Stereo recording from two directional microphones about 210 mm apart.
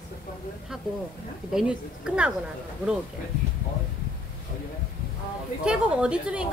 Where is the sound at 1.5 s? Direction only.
5° right (ahead or behind).